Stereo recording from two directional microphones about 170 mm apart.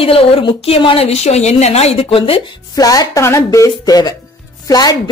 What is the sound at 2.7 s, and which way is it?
Speech, 20° left (ahead or behind).